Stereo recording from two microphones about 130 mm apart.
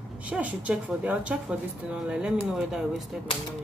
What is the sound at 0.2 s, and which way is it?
A woman's voice, 10° right (ahead or behind).